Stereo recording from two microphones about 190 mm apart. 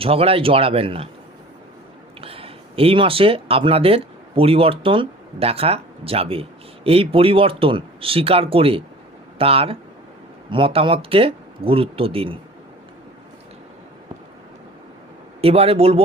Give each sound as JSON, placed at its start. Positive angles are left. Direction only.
{"t": 0.0, "sound": "a man's voice", "side_deg": -30}
{"t": 2.2, "sound": "a man's voice", "side_deg": -30}
{"t": 15.4, "sound": "a man's voice", "side_deg": -30}